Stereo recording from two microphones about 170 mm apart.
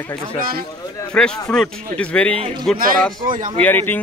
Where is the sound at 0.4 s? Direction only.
60° right (ahead or behind).